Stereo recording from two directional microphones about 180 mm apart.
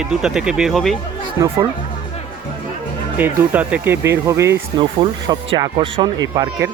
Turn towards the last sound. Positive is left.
turn(degrees=-20)  # may be behind; listen again after turning